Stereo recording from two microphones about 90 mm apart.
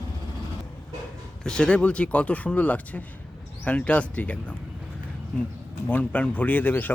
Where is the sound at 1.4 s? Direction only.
10° left (ahead or behind).